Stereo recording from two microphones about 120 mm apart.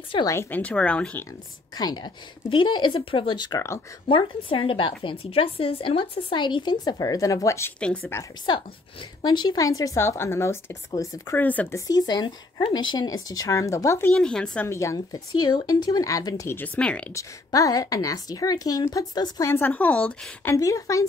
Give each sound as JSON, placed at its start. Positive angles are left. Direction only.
{"t": 0.3, "sound": "a woman's voice", "side_deg": 20}
{"t": 1.8, "sound": "a woman's voice", "side_deg": 35}
{"t": 4.1, "sound": "a woman's voice", "side_deg": 45}
{"t": 7.8, "sound": "a woman's voice", "side_deg": 10}
{"t": 9.2, "sound": "speech", "side_deg": 35}
{"t": 11.3, "sound": "a woman's voice", "side_deg": 15}
{"t": 11.7, "sound": "a woman's voice", "side_deg": 35}
{"t": 14.1, "sound": "a woman's voice", "side_deg": 5}
{"t": 14.7, "sound": "speech", "side_deg": 25}
{"t": 17.1, "sound": "a woman's voice", "side_deg": 25}
{"t": 19.4, "sound": "a woman's voice", "side_deg": 20}
{"t": 20.5, "sound": "speech", "side_deg": 25}